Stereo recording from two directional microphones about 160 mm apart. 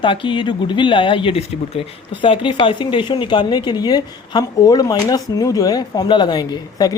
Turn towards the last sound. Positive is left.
turn(degrees=25)  # may be behind; listen again after turning